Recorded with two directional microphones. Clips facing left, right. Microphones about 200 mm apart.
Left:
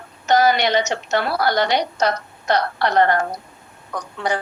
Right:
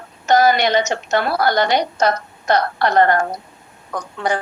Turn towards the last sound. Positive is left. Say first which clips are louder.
# right 2 dB
turn(degrees=-50)  # may be behind; listen again after turning